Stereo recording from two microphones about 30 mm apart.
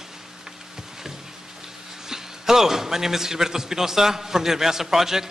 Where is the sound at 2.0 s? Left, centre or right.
Centre.